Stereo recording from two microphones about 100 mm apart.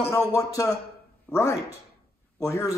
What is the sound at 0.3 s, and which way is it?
A man's voice, 30° left (ahead or behind).